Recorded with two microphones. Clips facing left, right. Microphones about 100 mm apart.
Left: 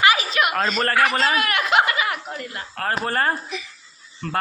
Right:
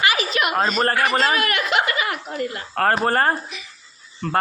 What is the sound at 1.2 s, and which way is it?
Speech, 50° right (ahead or behind).